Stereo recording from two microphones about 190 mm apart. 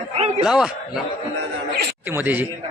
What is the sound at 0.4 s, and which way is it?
Speech, 5° right (ahead or behind).